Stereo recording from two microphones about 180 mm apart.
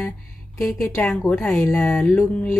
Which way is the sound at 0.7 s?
15° left (ahead or behind).